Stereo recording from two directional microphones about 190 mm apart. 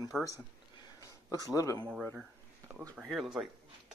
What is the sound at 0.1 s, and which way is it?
Speech, 5° left (ahead or behind).